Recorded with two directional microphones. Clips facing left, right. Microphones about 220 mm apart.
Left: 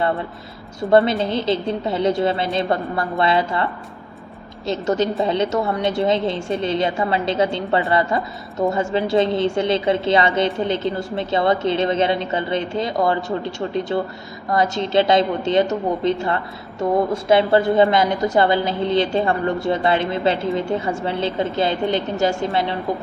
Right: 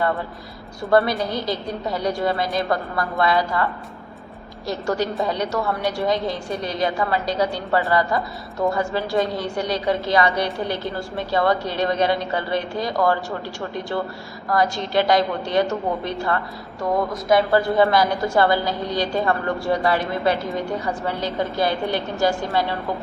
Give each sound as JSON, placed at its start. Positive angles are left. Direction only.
{"t": 0.8, "sound": "a woman's voice", "side_deg": 25}